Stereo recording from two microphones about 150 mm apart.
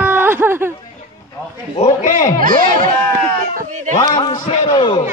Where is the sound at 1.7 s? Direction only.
55° left (ahead or behind).